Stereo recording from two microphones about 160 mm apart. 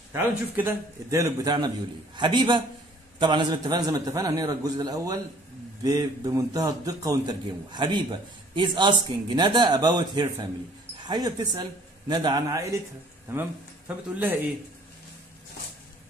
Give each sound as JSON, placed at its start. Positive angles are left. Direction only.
{"t": 0.1, "sound": "speech", "side_deg": -15}